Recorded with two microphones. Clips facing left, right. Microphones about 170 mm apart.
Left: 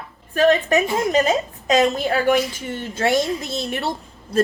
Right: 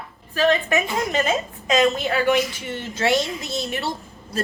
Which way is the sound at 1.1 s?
40° left (ahead or behind).